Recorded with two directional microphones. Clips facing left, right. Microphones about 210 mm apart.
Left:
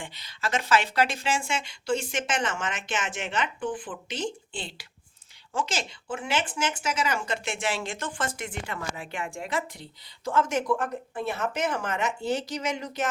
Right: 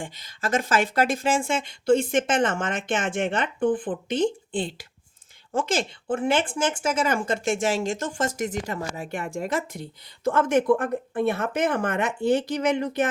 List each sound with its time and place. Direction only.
0.0 s a woman's voice: 45° right (ahead or behind)
10.2 s speech: 55° right (ahead or behind)